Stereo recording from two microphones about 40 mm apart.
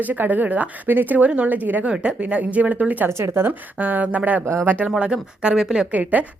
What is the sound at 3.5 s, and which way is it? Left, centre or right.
Speech, right.